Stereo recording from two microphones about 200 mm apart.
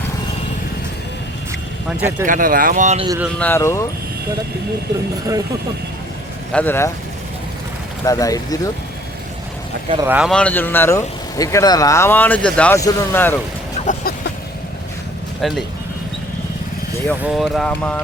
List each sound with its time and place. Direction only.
2.0 s speech: 15° right (ahead or behind)
2.2 s speech: 40° right (ahead or behind)
3.3 s speech: 10° left (ahead or behind)
6.5 s speech: 10° left (ahead or behind)
8.0 s speech: 15° left (ahead or behind)
10.1 s speech: 5° right (ahead or behind)
10.3 s speech: 10° left (ahead or behind)
13.7 s vehicle: 45° left (ahead or behind)
15.4 s speech: centre (ahead or behind)
17.2 s speech: centre (ahead or behind)